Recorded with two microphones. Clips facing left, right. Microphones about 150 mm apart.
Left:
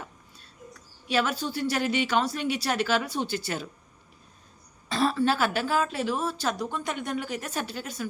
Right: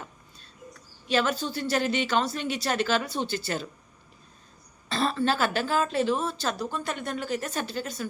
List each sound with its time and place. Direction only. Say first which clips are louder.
1.0 s a woman's voice: right 1 dB; 10° left (ahead or behind)
4.9 s a woman's voice: left 1 dB; 10° left (ahead or behind)